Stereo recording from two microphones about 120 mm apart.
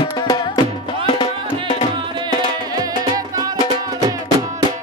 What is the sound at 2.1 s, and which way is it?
Music, 35° right (ahead or behind).